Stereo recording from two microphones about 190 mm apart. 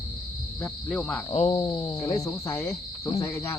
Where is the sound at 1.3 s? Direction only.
35° left (ahead or behind).